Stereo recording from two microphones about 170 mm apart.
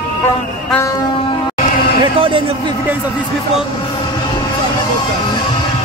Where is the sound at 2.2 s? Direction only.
30° right (ahead or behind).